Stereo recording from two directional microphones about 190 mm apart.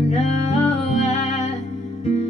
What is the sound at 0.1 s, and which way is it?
Music, 35° left (ahead or behind).